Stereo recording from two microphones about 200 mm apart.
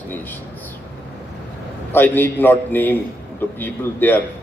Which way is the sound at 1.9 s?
10° left (ahead or behind).